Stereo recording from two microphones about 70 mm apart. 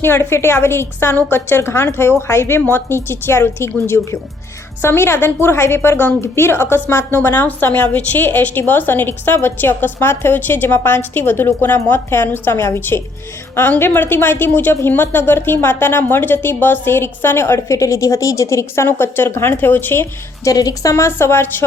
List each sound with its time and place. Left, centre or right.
0.0 s a woman's voice: left
17.7 s a woman's voice: left
20.4 s a woman's voice: left
20.9 s a woman's voice: left